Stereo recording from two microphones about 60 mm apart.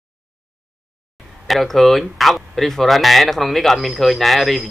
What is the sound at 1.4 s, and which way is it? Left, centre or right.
Speech, centre.